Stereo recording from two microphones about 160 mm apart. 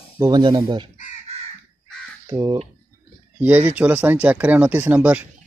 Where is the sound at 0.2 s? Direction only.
25° right (ahead or behind).